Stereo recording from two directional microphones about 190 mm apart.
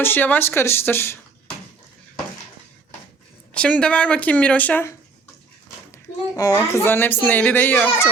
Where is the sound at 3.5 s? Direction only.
5° left (ahead or behind).